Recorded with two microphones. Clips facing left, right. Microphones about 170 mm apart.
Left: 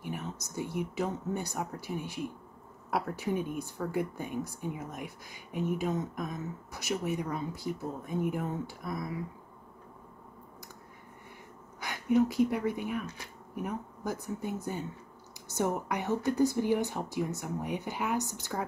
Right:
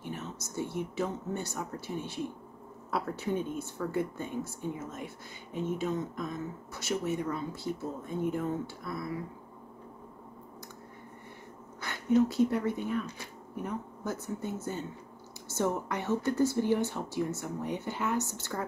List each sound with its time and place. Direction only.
0.0 s speech: 15° left (ahead or behind)
11.8 s speech: 15° left (ahead or behind)